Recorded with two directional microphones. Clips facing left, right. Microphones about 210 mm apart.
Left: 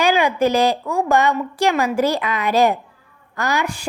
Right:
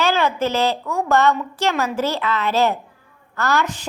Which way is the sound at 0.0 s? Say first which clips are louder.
Left 3 dB; 15° left (ahead or behind).